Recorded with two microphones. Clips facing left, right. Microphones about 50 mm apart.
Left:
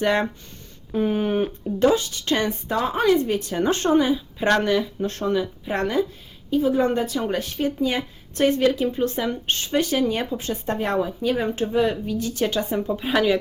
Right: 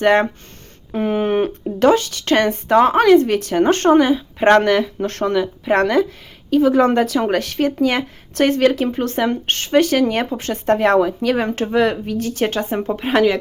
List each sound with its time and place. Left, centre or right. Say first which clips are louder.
0.0 s speech: right 7 dB; right
1.8 s speech: right 5 dB; right
6.5 s speech: right 6 dB; right